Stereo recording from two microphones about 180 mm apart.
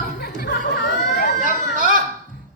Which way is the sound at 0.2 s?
60° left (ahead or behind).